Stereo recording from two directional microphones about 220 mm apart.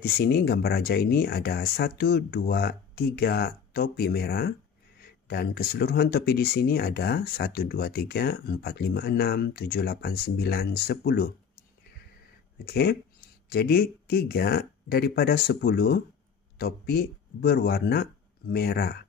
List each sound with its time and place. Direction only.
0.0 s speech: 45° left (ahead or behind)
12.6 s speech: 45° left (ahead or behind)